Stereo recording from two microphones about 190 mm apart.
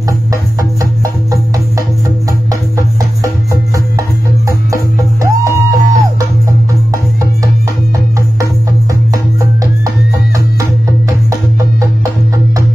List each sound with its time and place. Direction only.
1.3 s music: 20° right (ahead or behind)
5.2 s music: 15° right (ahead or behind)
9.1 s music: 15° right (ahead or behind)